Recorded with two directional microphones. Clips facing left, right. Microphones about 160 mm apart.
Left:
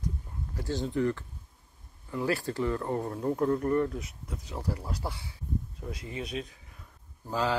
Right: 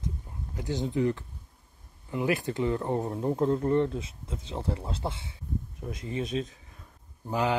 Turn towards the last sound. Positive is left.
turn(degrees=-15)  # may be behind; listen again after turning